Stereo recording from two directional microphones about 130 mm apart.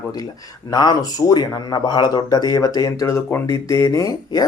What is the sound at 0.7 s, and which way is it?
A man's voice, 30° left (ahead or behind).